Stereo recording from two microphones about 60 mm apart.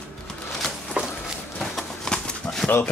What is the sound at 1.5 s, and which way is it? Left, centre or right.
Bird, centre.